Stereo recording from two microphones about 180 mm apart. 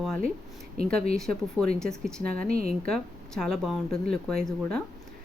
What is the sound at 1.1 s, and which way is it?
Speech, centre (ahead or behind).